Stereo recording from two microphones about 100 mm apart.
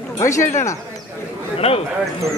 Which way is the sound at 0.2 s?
30° left (ahead or behind).